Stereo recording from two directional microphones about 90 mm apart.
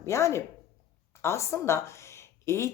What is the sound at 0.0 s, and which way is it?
A woman's voice, 35° left (ahead or behind).